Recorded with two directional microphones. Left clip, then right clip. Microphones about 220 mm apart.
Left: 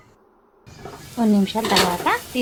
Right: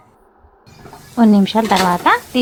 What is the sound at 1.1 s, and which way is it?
Speech, 20° right (ahead or behind).